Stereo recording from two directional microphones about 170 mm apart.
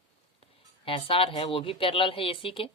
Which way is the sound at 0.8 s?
35° left (ahead or behind).